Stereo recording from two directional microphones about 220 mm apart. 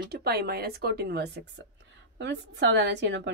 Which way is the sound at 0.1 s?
45° right (ahead or behind).